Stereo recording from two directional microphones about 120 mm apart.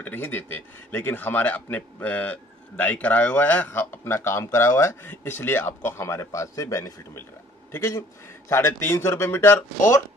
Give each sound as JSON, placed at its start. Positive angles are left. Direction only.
{"t": 0.0, "sound": "speech", "side_deg": 15}